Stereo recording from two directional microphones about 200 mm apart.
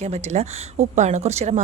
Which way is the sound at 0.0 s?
35° right (ahead or behind).